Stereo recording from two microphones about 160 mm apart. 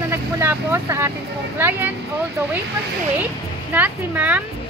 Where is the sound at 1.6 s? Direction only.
10° right (ahead or behind).